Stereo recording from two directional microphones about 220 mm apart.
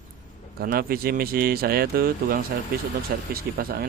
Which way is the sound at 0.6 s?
45° right (ahead or behind).